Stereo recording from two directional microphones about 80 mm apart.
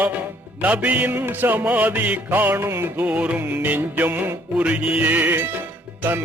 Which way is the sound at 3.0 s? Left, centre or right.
Centre.